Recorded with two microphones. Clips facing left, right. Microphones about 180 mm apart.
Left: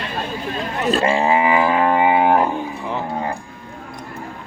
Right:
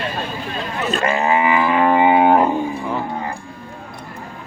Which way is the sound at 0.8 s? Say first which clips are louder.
Left 2 dB; 30° left (ahead or behind).